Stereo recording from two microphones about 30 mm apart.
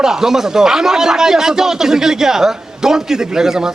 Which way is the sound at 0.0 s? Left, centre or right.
Centre.